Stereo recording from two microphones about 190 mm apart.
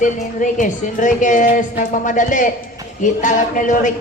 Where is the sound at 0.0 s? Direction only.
40° left (ahead or behind).